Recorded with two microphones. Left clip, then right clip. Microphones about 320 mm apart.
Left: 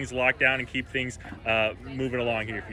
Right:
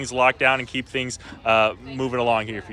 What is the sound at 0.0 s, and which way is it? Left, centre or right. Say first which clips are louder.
Speech: right 5 dB; centre.